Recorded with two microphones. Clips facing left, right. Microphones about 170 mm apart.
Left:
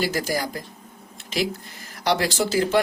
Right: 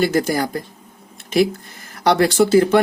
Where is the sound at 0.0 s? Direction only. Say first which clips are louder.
Right 7 dB; 55° right (ahead or behind).